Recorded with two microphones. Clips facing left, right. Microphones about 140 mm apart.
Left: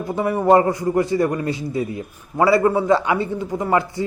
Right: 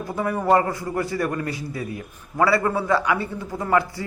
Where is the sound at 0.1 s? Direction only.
20° left (ahead or behind).